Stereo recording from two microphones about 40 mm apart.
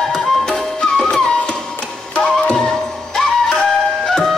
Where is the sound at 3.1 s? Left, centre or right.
Centre.